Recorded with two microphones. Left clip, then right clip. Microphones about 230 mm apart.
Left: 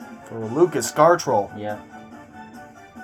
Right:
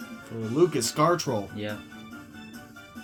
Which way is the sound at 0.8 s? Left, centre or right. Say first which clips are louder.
Left 8 dB; right.